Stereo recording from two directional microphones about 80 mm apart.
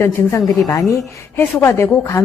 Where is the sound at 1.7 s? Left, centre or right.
Left.